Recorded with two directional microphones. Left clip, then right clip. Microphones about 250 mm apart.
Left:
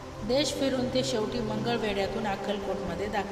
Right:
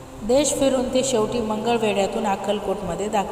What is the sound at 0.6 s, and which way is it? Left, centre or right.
A woman's voice, centre.